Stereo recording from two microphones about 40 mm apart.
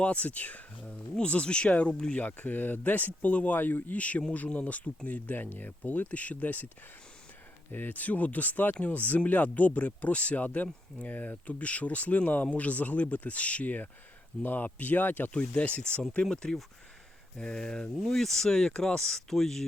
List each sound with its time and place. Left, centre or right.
0.0 s speech: left
1.2 s speech: left
2.1 s speech: left
3.6 s speech: left
3.9 s speech: left
7.7 s speech: left
15.3 s speech: left
16.3 s speech: centre
18.0 s speech: centre